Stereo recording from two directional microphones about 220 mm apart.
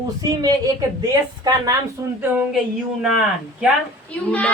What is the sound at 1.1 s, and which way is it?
A woman's voice, 15° right (ahead or behind).